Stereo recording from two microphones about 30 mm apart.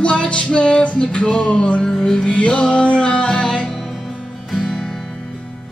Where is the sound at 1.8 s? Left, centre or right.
Centre.